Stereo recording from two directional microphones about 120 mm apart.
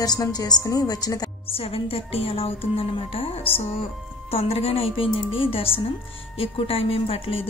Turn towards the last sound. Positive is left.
turn(degrees=50)  # may be behind; listen again after turning